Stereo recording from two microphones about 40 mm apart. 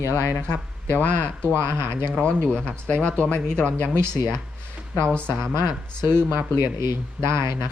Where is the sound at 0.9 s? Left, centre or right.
Right.